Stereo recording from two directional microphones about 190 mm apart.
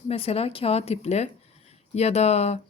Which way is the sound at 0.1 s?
30° left (ahead or behind).